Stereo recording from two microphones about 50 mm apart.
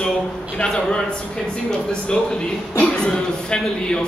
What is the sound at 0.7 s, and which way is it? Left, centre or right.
Speech, centre.